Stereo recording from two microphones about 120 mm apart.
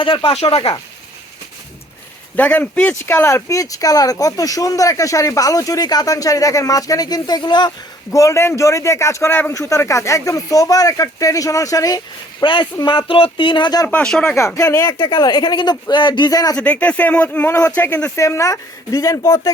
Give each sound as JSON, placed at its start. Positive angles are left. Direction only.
{"t": 0.0, "sound": "speech", "side_deg": 45}
{"t": 2.3, "sound": "speech", "side_deg": 15}
{"t": 8.1, "sound": "speech", "side_deg": 25}
{"t": 12.9, "sound": "speech", "side_deg": 45}
{"t": 13.8, "sound": "speech", "side_deg": 10}
{"t": 14.3, "sound": "speech", "side_deg": 25}
{"t": 14.9, "sound": "speech", "side_deg": 40}
{"t": 16.6, "sound": "speech", "side_deg": 10}
{"t": 18.2, "sound": "speech", "side_deg": 25}